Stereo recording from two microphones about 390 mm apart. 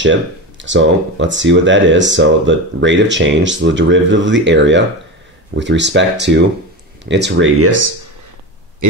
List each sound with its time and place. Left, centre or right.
0.0 s speech: right